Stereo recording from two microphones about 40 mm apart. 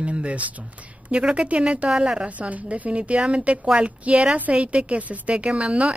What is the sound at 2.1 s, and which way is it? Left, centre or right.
Speech, right.